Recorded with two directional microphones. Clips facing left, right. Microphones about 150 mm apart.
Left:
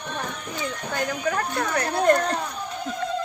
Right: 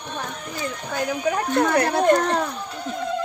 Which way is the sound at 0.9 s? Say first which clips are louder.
Right 3 dB; 5° right (ahead or behind).